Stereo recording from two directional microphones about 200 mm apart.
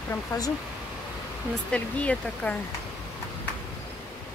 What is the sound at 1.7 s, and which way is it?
Speech, 5° left (ahead or behind).